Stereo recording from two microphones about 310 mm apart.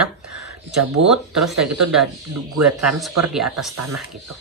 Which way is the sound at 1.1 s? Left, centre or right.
Centre.